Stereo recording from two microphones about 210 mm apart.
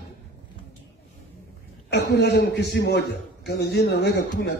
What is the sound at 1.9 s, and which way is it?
A man's voice, 55° left (ahead or behind).